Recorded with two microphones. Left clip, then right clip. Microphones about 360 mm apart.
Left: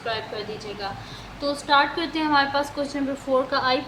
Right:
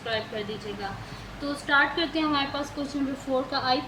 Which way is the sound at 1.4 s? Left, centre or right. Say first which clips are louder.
Left 3 dB; centre.